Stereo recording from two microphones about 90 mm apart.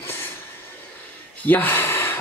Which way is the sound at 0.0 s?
25° left (ahead or behind).